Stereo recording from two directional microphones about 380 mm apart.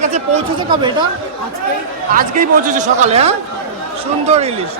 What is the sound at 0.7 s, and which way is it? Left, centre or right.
Speech, centre.